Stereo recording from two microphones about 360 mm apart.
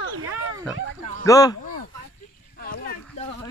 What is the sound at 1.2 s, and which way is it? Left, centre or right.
Speech, centre.